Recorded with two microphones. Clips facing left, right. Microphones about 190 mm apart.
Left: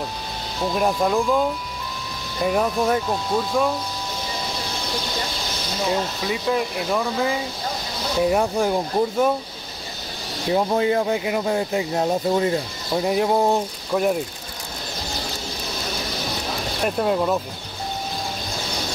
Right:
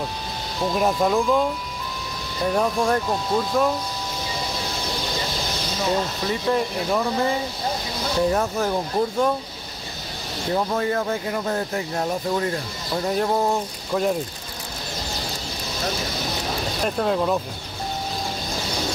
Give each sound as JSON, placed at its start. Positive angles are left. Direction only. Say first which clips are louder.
{"t": 0.7, "sound": "speech", "louder": "even", "side_deg": 0}
{"t": 2.4, "sound": "speech", "louder": "left 1 dB", "side_deg": 5}
{"t": 6.2, "sound": "speech", "louder": "right 1 dB", "side_deg": 5}
{"t": 8.2, "sound": "speech", "louder": "left 2 dB", "side_deg": 15}
{"t": 10.5, "sound": "speech", "louder": "left 3 dB", "side_deg": 15}
{"t": 16.8, "sound": "speech", "louder": "left 2 dB", "side_deg": 5}